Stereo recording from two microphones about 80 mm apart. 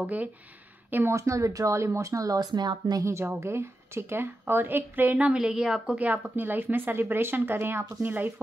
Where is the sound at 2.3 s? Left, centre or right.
Right.